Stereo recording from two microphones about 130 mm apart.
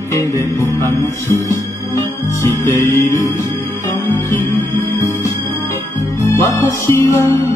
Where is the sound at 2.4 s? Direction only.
20° left (ahead or behind).